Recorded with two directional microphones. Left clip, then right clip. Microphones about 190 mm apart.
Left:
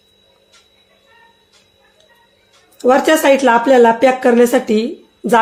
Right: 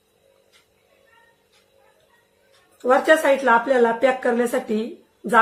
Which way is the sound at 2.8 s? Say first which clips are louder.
Left 5 dB; 50° left (ahead or behind).